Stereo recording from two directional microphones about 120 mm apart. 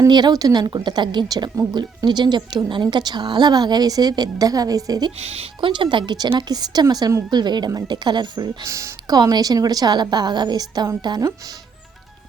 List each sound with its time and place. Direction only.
0.1 s a woman's voice: 35° right (ahead or behind)
5.1 s a woman's voice: 60° right (ahead or behind); by 8.4 s 35° right (ahead or behind)
8.6 s a woman's voice: 25° right (ahead or behind)